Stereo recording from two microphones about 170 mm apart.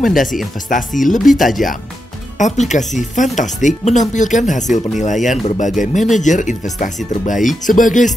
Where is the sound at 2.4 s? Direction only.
45° left (ahead or behind).